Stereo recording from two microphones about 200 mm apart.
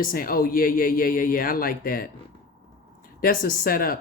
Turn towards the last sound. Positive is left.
turn(degrees=45)  # may be behind; listen again after turning